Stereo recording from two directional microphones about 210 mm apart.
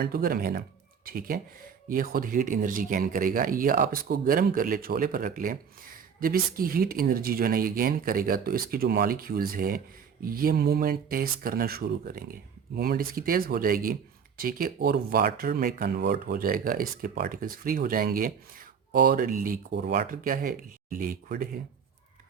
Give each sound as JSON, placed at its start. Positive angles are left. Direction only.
{"t": 0.0, "sound": "speech", "side_deg": -45}